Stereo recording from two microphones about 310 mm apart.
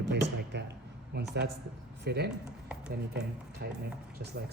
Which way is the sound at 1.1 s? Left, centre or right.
Right.